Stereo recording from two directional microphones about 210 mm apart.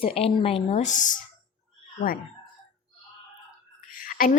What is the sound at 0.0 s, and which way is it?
Speech, 25° left (ahead or behind).